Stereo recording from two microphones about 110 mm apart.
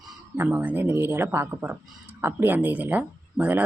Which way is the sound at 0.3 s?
15° right (ahead or behind).